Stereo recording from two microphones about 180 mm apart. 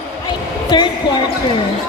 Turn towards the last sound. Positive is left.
turn(degrees=25)  # may be behind; listen again after turning